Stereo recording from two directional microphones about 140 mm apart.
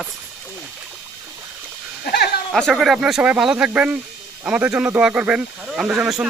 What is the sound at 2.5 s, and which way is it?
Speech, centre (ahead or behind).